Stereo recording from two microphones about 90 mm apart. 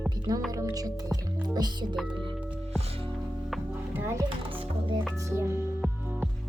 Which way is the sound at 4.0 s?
30° right (ahead or behind).